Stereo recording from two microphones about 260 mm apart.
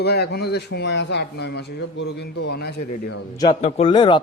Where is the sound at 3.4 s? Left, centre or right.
Left.